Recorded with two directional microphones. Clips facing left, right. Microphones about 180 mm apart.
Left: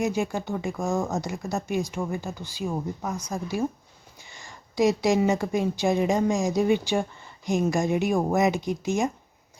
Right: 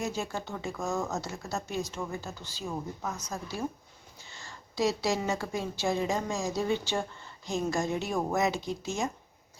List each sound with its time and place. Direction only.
0.0 s a woman's voice: 15° left (ahead or behind)